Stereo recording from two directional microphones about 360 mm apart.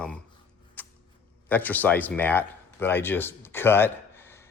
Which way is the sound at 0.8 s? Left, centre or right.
Centre.